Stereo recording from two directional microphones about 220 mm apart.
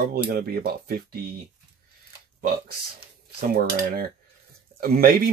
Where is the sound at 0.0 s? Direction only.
45° right (ahead or behind).